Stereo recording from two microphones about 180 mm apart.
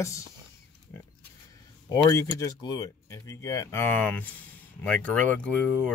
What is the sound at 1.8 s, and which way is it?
Speech, 20° left (ahead or behind).